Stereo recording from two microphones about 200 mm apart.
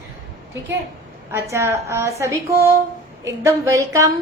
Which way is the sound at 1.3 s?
15° right (ahead or behind).